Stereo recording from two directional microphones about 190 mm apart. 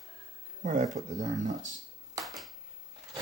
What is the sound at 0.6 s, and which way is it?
Speech, 40° right (ahead or behind).